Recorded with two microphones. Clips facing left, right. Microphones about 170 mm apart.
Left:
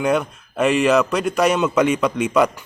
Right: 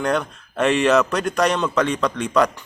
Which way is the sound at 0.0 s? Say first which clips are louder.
Left 3 dB; 5° left (ahead or behind).